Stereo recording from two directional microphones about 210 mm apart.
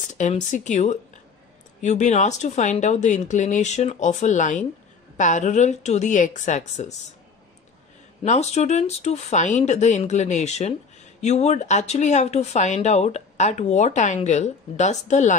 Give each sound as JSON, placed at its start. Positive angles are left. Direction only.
{"t": 0.1, "sound": "speech", "side_deg": 35}
{"t": 8.2, "sound": "speech", "side_deg": 30}